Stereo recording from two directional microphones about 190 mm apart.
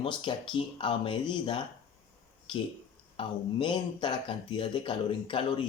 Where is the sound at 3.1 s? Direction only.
25° left (ahead or behind).